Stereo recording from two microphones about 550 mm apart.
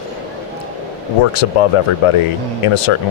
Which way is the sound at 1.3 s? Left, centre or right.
Left.